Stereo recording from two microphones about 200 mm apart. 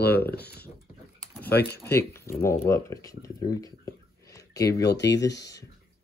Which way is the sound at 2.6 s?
15° left (ahead or behind).